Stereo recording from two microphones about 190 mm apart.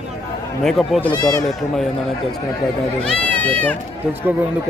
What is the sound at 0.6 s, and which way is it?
Speech, centre (ahead or behind).